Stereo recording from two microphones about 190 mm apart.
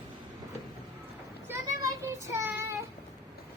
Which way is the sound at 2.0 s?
15° right (ahead or behind).